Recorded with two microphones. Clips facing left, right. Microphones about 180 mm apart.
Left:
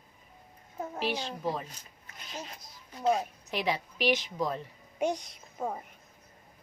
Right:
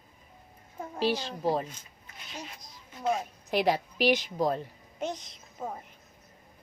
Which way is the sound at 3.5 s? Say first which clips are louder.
Right 6 dB; 40° right (ahead or behind).